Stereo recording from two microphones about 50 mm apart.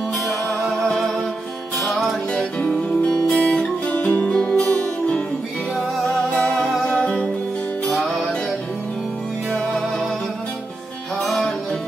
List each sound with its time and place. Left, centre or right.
0.7 s music: centre
3.3 s guitar: centre
4.3 s music: centre
6.3 s music: centre
7.9 s music: centre
9.5 s music: centre
11.2 s music: centre